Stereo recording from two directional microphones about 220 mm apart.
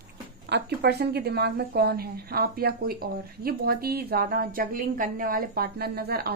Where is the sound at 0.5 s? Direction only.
50° right (ahead or behind).